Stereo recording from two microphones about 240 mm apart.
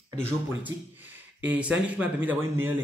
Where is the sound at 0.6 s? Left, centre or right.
Centre.